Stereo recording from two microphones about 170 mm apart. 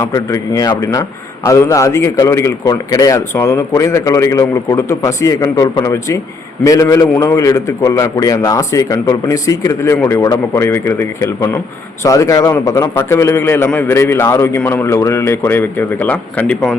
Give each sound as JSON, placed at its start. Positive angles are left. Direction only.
{"t": 0.0, "sound": "a man's voice", "side_deg": 20}